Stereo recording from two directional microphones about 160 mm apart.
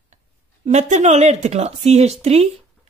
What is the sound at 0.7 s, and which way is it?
Speech, 45° right (ahead or behind).